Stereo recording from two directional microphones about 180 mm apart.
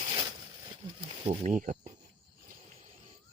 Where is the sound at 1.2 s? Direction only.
30° right (ahead or behind).